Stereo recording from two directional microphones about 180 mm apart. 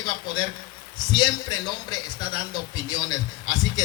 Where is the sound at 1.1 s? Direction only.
25° left (ahead or behind).